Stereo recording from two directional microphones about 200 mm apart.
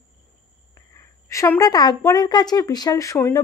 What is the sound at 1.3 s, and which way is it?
Speech, 15° left (ahead or behind).